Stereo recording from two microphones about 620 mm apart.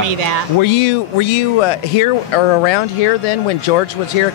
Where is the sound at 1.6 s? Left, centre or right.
Left.